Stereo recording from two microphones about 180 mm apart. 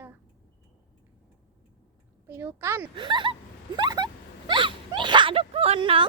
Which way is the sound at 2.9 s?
25° right (ahead or behind).